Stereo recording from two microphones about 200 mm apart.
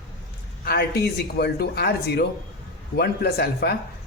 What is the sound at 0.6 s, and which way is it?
A man's voice, 50° left (ahead or behind).